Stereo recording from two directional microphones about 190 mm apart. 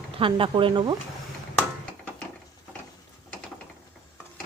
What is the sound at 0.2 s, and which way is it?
Speech, 25° right (ahead or behind).